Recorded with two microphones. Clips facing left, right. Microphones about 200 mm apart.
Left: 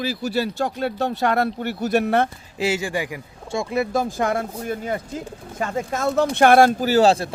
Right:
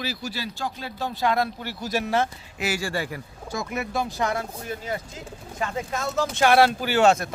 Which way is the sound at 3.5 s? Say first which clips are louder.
Left 7 dB; 30° left (ahead or behind).